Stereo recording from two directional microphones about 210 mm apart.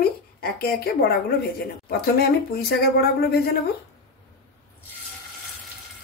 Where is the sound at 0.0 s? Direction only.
45° left (ahead or behind).